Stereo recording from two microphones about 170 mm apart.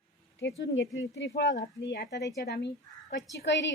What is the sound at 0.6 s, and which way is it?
Speech, 90° left.